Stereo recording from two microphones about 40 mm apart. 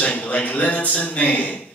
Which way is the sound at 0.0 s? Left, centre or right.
Left.